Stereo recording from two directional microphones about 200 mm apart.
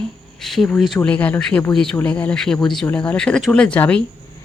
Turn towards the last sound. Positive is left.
turn(degrees=5)  # may be behind; listen again after turning